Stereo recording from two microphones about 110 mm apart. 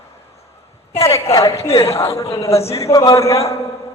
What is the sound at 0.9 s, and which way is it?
A man's voice, 30° left (ahead or behind).